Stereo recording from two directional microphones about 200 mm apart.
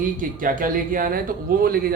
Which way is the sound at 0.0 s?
45° right (ahead or behind).